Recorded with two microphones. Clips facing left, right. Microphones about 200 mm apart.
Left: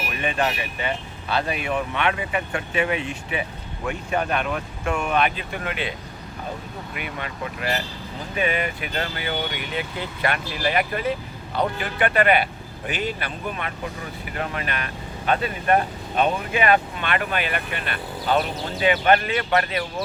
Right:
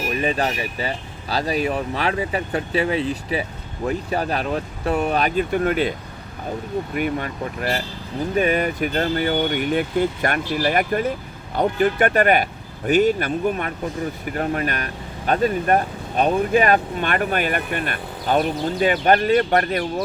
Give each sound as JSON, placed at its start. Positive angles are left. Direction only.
{"t": 0.2, "sound": "speech", "side_deg": -35}
{"t": 6.9, "sound": "speech", "side_deg": -45}